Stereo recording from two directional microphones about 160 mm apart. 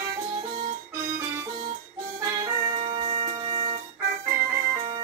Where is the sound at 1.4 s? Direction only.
25° right (ahead or behind).